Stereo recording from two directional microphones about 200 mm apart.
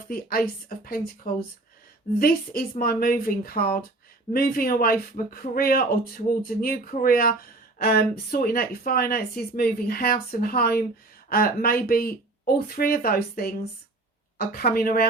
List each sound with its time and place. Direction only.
0.1 s speech: 45° left (ahead or behind)